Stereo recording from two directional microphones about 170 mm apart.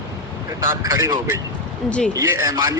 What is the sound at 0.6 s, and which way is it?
A man's voice, 15° right (ahead or behind).